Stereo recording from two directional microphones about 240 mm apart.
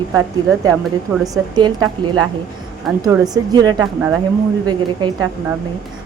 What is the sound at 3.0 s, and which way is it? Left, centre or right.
A woman's voice, centre.